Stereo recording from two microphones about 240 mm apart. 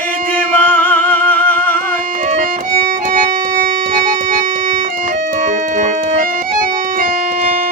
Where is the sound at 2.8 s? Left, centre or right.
Right.